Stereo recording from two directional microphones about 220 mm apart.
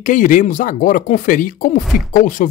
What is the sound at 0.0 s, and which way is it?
Speech, 35° left (ahead or behind).